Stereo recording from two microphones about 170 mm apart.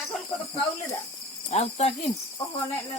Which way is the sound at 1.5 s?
40° left (ahead or behind).